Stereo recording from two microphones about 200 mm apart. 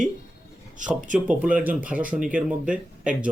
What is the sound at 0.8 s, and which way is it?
Speech, 40° right (ahead or behind).